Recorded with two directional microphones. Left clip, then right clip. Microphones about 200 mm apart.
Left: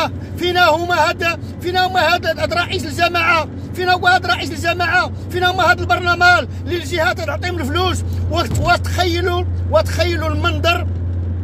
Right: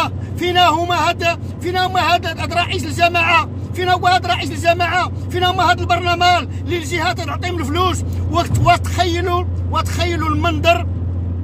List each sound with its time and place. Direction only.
0.0 s speech: 15° right (ahead or behind)